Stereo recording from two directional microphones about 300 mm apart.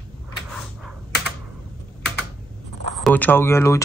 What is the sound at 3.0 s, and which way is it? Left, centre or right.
Speech, centre.